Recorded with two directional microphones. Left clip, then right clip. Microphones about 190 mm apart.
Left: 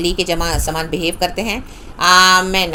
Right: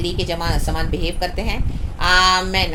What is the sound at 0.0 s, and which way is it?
A woman's voice, 40° left (ahead or behind).